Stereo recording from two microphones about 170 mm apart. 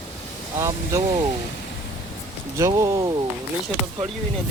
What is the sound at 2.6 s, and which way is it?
Speech, 20° right (ahead or behind).